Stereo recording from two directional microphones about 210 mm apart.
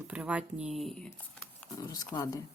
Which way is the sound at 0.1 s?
5° right (ahead or behind).